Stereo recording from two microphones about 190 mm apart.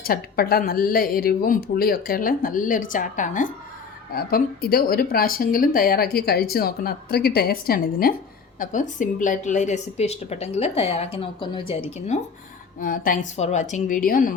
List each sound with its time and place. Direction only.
0.0 s a woman's voice: 50° left (ahead or behind)
12.8 s speech: 50° left (ahead or behind)